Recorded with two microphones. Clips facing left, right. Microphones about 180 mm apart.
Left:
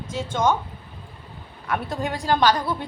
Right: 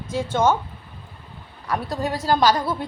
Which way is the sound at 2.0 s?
40° right (ahead or behind).